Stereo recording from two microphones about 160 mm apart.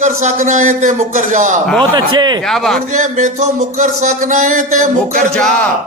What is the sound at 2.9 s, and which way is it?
A man's voice, 50° right (ahead or behind).